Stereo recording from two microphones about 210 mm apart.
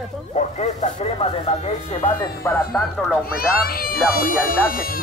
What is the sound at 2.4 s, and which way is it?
Speech, 10° left (ahead or behind).